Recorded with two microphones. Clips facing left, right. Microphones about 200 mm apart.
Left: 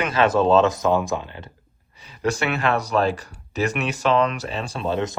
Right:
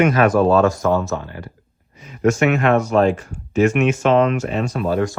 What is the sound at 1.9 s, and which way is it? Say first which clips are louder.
Speech: right 7 dB; 35° left (ahead or behind).